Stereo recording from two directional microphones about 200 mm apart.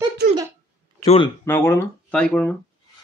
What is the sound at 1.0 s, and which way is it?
Speech, 30° left (ahead or behind).